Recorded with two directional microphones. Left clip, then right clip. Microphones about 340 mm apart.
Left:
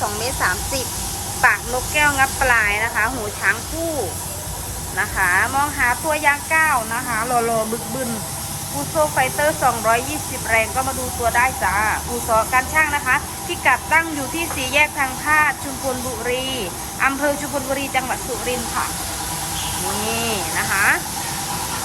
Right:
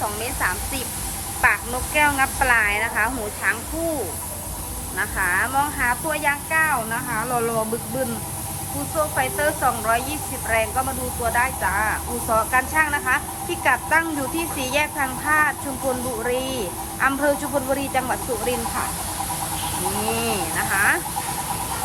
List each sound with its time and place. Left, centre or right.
1.4 s speech: centre
4.9 s speech: centre
9.1 s speech: centre
20.2 s speech: centre